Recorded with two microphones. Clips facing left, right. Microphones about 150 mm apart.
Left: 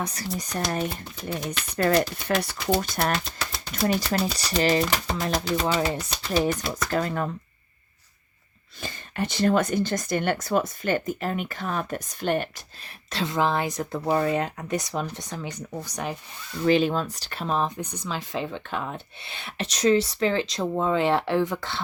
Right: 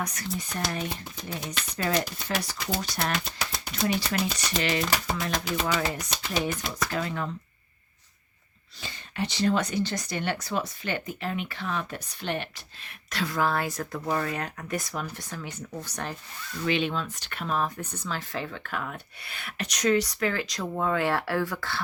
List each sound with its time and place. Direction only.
0.0 s speech: 30° left (ahead or behind)
1.5 s speech: 60° left (ahead or behind)
3.2 s a sound: centre (ahead or behind)
4.1 s speech: 35° left (ahead or behind)
6.3 s speech: 45° left (ahead or behind)
8.8 s speech: 45° left (ahead or behind)
13.1 s speech: 25° left (ahead or behind)
16.6 s speech: 40° left (ahead or behind); by 21.8 s 20° left (ahead or behind)